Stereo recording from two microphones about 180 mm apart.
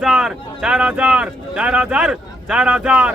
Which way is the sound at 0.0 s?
5° right (ahead or behind).